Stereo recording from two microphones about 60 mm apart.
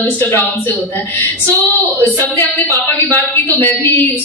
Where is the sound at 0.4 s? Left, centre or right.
Left.